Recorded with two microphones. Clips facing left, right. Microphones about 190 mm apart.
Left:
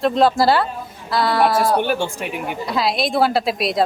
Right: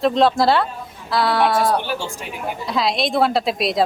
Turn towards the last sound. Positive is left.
turn(degrees=0)  # may be behind; listen again after turning